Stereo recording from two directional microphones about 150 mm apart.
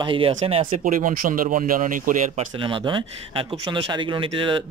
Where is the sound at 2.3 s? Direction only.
35° right (ahead or behind).